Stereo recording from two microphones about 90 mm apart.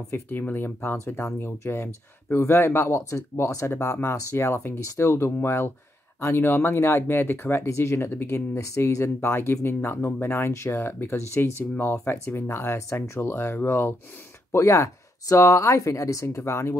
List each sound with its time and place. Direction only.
0.1 s speech: 20° left (ahead or behind)